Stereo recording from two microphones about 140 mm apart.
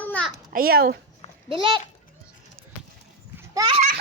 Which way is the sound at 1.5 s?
35° right (ahead or behind).